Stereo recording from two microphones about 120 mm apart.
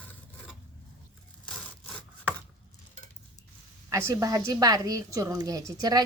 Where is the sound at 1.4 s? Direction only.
5° left (ahead or behind).